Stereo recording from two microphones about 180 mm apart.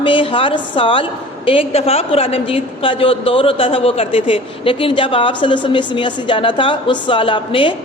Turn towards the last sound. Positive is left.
turn(degrees=30)  # may be behind; listen again after turning